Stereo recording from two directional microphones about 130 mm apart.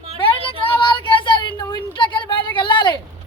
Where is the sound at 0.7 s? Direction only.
40° left (ahead or behind).